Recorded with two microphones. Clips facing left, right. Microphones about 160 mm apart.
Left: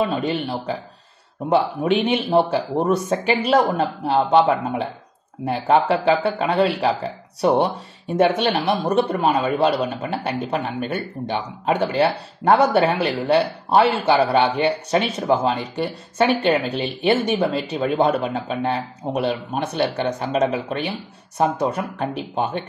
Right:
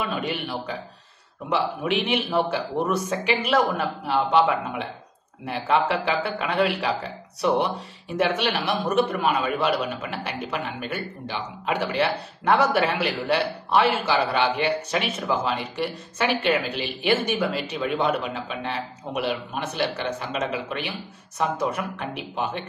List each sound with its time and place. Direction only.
0.0 s speech: 35° left (ahead or behind)